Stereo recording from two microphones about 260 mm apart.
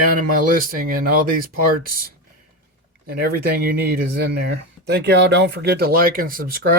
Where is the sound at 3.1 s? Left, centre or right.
Right.